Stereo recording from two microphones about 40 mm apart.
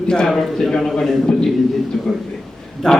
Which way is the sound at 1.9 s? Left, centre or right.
Centre.